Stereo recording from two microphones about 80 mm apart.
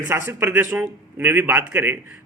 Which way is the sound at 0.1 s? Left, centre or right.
Right.